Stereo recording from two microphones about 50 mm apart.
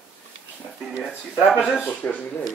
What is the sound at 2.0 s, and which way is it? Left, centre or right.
Dishes, left.